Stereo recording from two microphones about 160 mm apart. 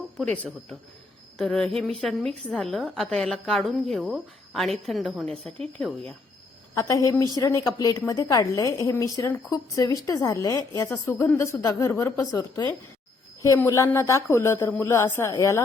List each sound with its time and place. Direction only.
0.2 s a woman's voice: 5° left (ahead or behind)
6.7 s a woman's voice: 20° left (ahead or behind)